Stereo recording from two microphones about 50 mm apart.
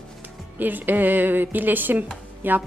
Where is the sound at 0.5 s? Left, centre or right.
Right.